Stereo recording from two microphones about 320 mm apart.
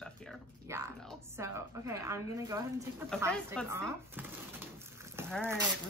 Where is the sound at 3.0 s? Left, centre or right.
Centre.